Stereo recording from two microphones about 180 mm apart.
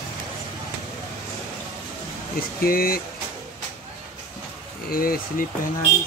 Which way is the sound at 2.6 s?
55° left (ahead or behind).